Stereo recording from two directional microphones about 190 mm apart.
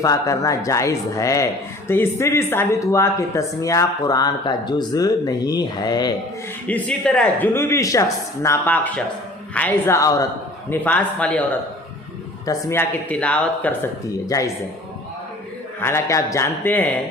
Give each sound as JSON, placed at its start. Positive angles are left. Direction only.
{"t": 0.0, "sound": "speech", "side_deg": 15}
{"t": 6.7, "sound": "speech", "side_deg": 5}
{"t": 12.5, "sound": "speech", "side_deg": 15}
{"t": 15.8, "sound": "speech", "side_deg": 15}